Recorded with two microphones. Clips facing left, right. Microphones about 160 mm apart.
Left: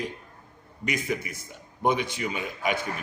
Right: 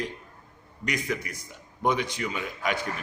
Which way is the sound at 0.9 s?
25° left (ahead or behind).